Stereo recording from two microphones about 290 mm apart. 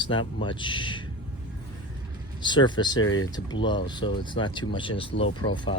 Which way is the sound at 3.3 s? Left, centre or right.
Centre.